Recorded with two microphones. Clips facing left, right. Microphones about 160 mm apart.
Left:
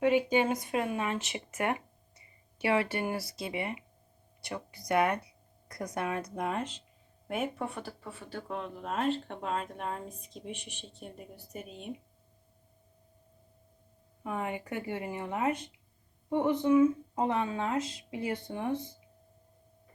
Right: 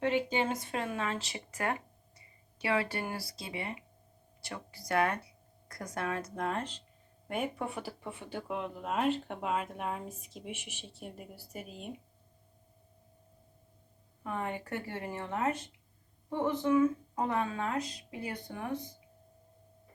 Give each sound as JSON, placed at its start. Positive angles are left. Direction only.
{"t": 0.0, "sound": "speech", "side_deg": 15}
{"t": 4.9, "sound": "speech", "side_deg": 15}
{"t": 14.3, "sound": "speech", "side_deg": 10}